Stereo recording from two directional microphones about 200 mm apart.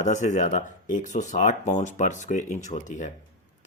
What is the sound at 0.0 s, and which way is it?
Speech, 35° left (ahead or behind).